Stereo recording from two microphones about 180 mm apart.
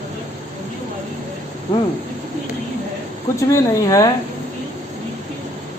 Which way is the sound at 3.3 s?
20° left (ahead or behind).